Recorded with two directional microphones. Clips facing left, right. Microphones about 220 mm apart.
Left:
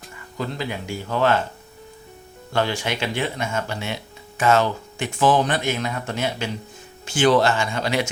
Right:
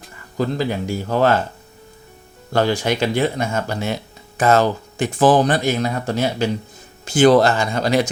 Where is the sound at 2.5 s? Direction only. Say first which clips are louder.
Right 5 dB; 40° right (ahead or behind).